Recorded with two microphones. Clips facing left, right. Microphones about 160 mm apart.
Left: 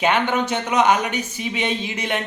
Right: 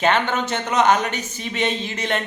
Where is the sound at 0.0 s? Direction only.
10° left (ahead or behind).